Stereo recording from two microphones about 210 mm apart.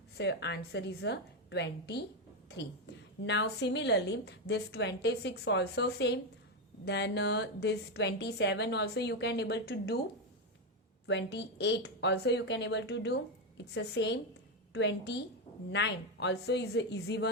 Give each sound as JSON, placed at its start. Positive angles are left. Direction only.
{"t": 0.2, "sound": "a woman's voice", "side_deg": 55}
{"t": 11.0, "sound": "a woman's voice", "side_deg": 55}